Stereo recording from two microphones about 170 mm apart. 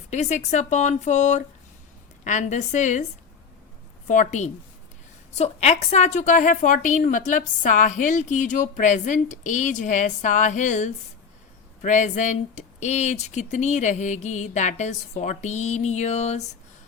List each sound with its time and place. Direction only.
0.1 s a woman's voice: 45° left (ahead or behind)
4.0 s a woman's voice: 45° left (ahead or behind)